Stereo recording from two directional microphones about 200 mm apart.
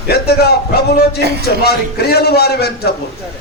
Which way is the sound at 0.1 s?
50° left (ahead or behind).